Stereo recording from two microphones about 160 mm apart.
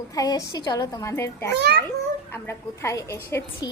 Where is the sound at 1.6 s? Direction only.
90° right.